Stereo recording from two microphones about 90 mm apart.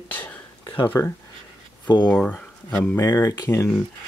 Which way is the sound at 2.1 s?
15° left (ahead or behind).